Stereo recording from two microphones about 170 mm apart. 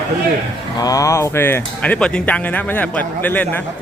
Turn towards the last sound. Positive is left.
turn(degrees=10)  # may be behind; listen again after turning